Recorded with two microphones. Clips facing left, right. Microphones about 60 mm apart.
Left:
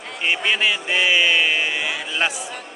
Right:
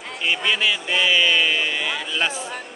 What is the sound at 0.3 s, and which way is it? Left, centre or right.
A man's voice, left.